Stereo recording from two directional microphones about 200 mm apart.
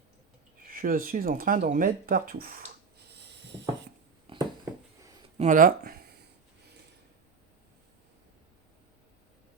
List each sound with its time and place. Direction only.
0.7 s speech: 45° right (ahead or behind)
4.3 s a sound: 25° right (ahead or behind)
5.4 s speech: 40° right (ahead or behind)